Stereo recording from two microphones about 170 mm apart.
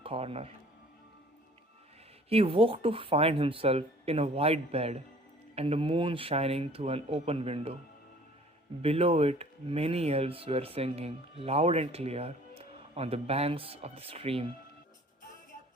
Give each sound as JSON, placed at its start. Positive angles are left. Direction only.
{"t": 0.0, "sound": "speech", "side_deg": -35}
{"t": 2.3, "sound": "speech", "side_deg": -35}
{"t": 8.8, "sound": "speech", "side_deg": -35}